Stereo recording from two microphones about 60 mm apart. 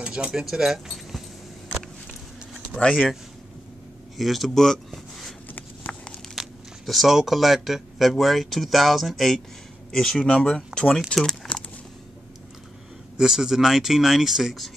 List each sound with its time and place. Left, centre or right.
0.0 s speech: centre
1.7 s a sound: centre
2.9 s speech: centre
4.2 s speech: centre
5.9 s crumpling: centre
6.4 s a sound: centre
6.9 s speech: centre
11.5 s a sound: left
13.2 s speech: centre